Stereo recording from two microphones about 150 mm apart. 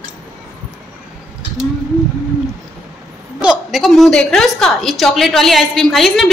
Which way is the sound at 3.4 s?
5° right (ahead or behind).